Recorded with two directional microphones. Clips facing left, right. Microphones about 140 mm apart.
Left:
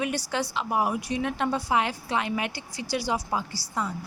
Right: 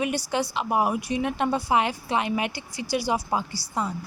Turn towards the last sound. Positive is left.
turn(degrees=-20)  # may be behind; listen again after turning